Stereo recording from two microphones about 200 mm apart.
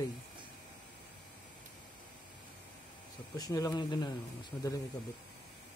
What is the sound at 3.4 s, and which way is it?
Speech, 20° left (ahead or behind).